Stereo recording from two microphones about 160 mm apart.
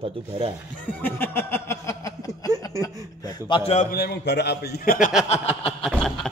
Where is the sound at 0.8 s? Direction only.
10° left (ahead or behind).